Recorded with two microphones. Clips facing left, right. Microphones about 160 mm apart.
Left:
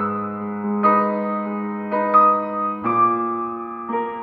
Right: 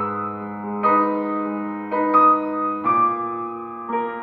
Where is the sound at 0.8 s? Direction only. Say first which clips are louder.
Even; 15° right (ahead or behind).